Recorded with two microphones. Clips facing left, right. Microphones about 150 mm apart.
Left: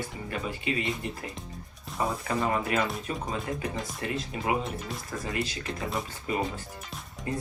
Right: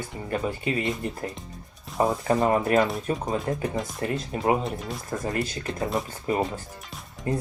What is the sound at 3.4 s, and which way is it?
Speech, 45° right (ahead or behind).